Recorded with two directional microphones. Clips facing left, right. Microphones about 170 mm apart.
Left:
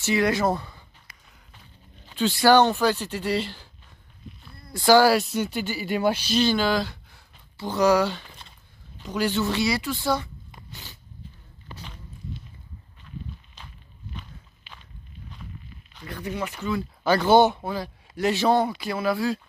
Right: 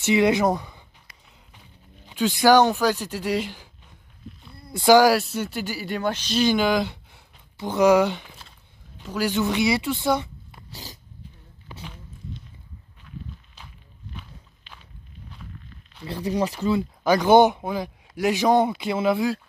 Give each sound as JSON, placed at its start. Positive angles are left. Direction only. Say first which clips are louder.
{"t": 0.0, "sound": "speech", "louder": "right 3 dB", "side_deg": -20}
{"t": 2.0, "sound": "speech", "louder": "right 1 dB", "side_deg": -10}
{"t": 4.2, "sound": "a sound", "louder": "right 2 dB", "side_deg": 0}
{"t": 4.6, "sound": "speech", "louder": "right 2 dB", "side_deg": -25}
{"t": 5.1, "sound": "speech", "louder": "left 1 dB", "side_deg": 0}
{"t": 5.9, "sound": "speech", "louder": "left 2 dB", "side_deg": 10}
{"t": 6.4, "sound": "speech", "louder": "right 3 dB", "side_deg": -15}
{"t": 10.7, "sound": "dog", "louder": "right 5 dB", "side_deg": -35}
{"t": 13.6, "sound": "walk", "louder": "even", "side_deg": -10}
{"t": 16.1, "sound": "speech", "louder": "right 6 dB", "side_deg": -35}
{"t": 17.0, "sound": "speech", "louder": "right 2 dB", "side_deg": -15}